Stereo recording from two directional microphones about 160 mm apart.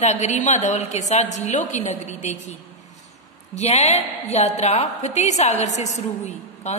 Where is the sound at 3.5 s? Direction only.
40° left (ahead or behind).